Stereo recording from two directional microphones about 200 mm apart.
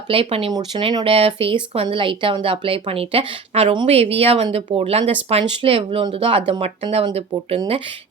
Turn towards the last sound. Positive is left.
turn(degrees=-30)  # may be behind; listen again after turning